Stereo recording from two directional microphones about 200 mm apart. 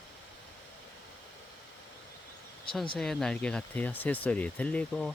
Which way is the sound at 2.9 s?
Centre (ahead or behind).